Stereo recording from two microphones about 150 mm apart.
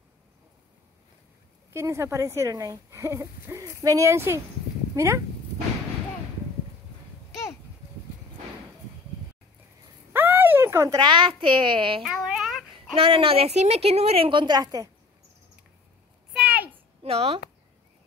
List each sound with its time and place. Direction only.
1.7 s speech: 20° right (ahead or behind)
10.1 s speech: 15° right (ahead or behind); by 12.0 s 35° right (ahead or behind)
12.0 s a sound: centre (ahead or behind)
12.9 s a woman's voice: 40° right (ahead or behind)
16.3 s a sound: 10° right (ahead or behind)
17.0 s speech: 45° right (ahead or behind)